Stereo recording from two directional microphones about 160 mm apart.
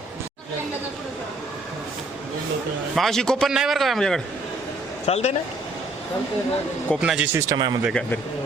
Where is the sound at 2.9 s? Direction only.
Centre (ahead or behind).